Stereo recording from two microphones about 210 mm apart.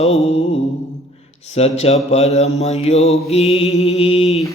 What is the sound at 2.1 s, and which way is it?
Mantra, 30° left (ahead or behind).